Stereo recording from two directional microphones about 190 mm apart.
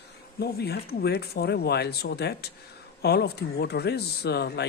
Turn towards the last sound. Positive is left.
turn(degrees=60)  # may be behind; listen again after turning